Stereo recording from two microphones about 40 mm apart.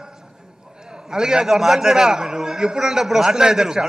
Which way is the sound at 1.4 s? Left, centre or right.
Centre.